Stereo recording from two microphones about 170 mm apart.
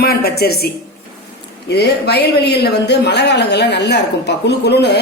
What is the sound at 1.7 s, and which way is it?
A woman's voice, 70° left (ahead or behind).